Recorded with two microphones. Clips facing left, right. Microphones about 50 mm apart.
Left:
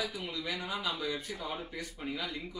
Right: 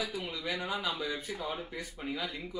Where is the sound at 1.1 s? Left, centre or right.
Right.